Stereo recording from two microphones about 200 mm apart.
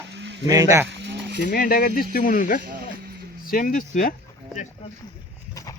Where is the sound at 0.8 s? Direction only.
60° right (ahead or behind).